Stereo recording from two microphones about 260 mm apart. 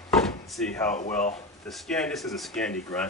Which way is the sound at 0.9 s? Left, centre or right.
Left.